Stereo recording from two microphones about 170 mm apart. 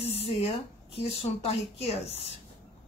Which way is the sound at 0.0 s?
35° left (ahead or behind).